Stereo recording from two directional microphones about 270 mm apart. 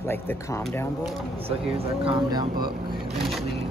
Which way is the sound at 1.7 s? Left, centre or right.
Right.